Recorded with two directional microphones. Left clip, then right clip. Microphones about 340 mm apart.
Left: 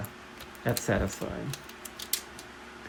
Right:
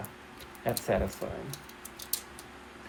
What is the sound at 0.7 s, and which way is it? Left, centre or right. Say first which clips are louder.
Speech: even; left.